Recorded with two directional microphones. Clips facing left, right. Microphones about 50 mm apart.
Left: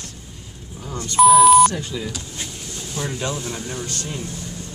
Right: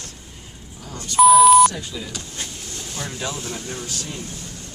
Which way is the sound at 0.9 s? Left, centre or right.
Left.